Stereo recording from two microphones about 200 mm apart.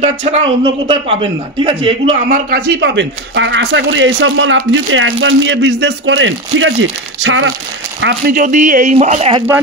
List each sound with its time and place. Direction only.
0.0 s speech: 35° right (ahead or behind); by 7.5 s 70° right (ahead or behind)
8.3 s speech: 40° right (ahead or behind)